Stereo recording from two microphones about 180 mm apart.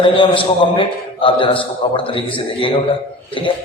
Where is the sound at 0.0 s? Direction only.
30° left (ahead or behind).